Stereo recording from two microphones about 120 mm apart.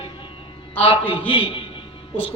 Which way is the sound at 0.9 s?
45° left (ahead or behind).